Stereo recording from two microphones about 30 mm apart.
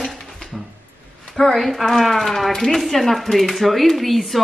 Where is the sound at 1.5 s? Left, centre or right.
Centre.